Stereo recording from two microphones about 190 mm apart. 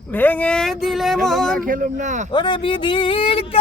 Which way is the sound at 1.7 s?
45° right (ahead or behind).